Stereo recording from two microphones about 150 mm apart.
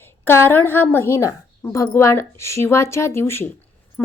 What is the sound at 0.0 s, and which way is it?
A woman's voice, 15° left (ahead or behind).